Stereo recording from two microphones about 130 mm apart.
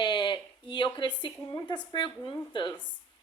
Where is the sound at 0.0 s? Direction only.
35° left (ahead or behind).